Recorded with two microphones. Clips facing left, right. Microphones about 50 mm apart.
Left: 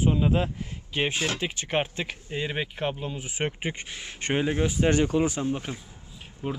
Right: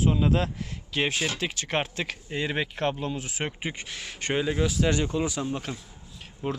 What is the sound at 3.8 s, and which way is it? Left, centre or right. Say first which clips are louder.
Speech: even; left.